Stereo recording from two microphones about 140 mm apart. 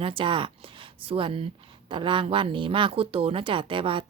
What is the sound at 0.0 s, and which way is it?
A woman's voice, 40° right (ahead or behind).